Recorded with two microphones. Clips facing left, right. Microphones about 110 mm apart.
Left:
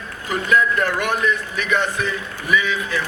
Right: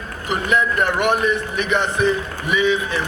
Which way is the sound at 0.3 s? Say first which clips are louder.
Left 1 dB; 20° right (ahead or behind).